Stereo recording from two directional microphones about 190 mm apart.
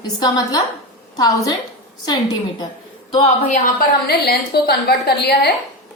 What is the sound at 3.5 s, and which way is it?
A woman's voice, 50° left (ahead or behind).